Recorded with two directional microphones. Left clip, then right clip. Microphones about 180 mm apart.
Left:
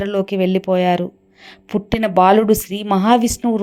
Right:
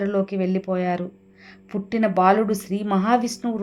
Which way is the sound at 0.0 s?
30° left (ahead or behind).